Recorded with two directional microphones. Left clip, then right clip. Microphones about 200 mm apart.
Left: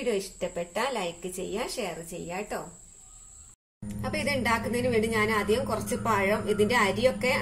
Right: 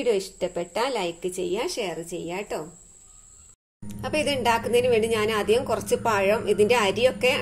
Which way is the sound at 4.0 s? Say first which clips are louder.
Right 5 dB; 35° right (ahead or behind).